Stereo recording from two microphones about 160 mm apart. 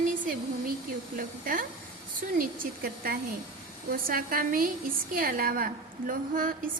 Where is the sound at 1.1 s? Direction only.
60° right (ahead or behind).